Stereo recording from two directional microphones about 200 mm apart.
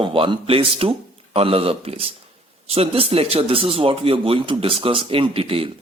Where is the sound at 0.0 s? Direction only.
25° right (ahead or behind).